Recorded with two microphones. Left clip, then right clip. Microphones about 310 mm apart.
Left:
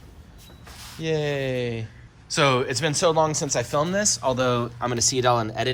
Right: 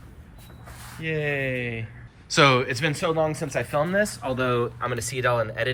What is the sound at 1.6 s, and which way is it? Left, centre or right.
Speech, left.